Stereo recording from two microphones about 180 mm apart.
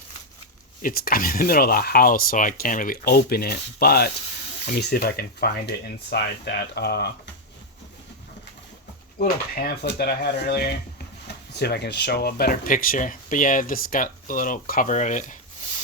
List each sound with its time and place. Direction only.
0.8 s speech: 55° left (ahead or behind)
9.1 s speech: 55° left (ahead or behind)